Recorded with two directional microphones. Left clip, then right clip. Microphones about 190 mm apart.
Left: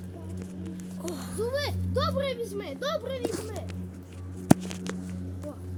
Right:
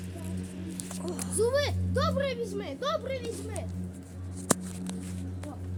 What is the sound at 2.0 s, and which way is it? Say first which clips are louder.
A woman's voice: left 1 dB; 35° left (ahead or behind).